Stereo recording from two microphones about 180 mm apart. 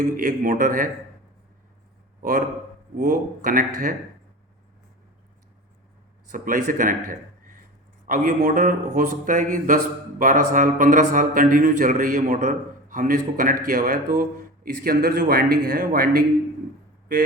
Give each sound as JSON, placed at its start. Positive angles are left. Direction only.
{"t": 0.2, "sound": "speech", "side_deg": -45}
{"t": 2.2, "sound": "speech", "side_deg": -50}
{"t": 6.3, "sound": "a man's voice", "side_deg": -45}